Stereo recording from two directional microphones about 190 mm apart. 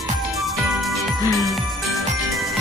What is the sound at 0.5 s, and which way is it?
Music, centre (ahead or behind).